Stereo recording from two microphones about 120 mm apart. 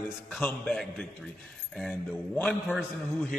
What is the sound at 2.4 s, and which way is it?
Speech, 5° left (ahead or behind).